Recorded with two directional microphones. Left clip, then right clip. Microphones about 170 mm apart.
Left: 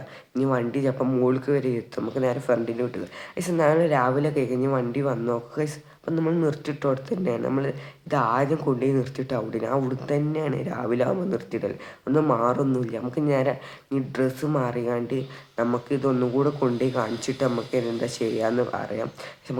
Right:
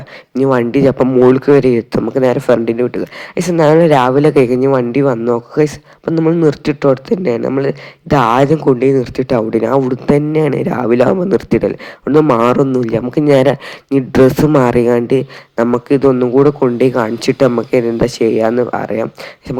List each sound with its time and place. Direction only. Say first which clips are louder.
0.3 s speech: right 13 dB; 45° right (ahead or behind)